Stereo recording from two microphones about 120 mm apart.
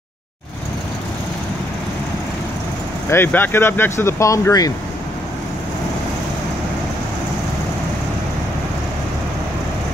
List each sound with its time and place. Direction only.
3.1 s speech: 20° left (ahead or behind)